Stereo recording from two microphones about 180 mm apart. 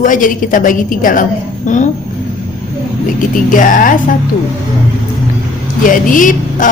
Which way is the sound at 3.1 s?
50° left (ahead or behind).